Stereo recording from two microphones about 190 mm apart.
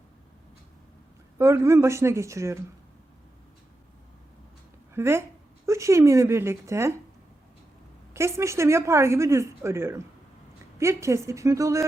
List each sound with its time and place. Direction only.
1.4 s speech: 15° right (ahead or behind)
4.9 s speech: 15° right (ahead or behind)
8.1 s speech: 15° right (ahead or behind)